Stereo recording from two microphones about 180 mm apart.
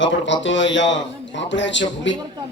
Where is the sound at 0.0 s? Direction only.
90° left.